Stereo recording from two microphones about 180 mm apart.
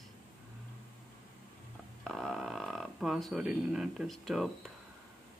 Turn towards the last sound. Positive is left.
turn(degrees=0)  # may be behind; listen again after turning